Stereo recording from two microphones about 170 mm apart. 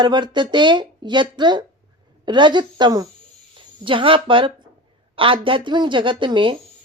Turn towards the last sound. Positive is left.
turn(degrees=-30)  # may be behind; listen again after turning